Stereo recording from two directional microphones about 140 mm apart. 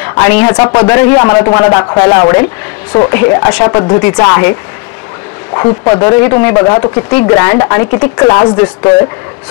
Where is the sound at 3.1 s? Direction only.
15° left (ahead or behind).